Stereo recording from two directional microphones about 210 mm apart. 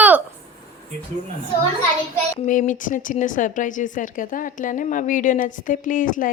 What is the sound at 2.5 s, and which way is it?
Speech, 40° left (ahead or behind).